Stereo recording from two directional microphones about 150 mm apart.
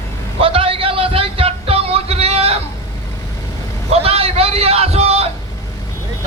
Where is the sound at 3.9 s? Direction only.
40° right (ahead or behind).